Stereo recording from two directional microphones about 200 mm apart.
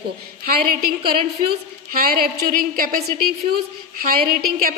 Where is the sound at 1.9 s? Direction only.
50° right (ahead or behind).